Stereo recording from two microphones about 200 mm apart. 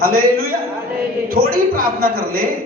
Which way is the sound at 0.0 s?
45° right (ahead or behind).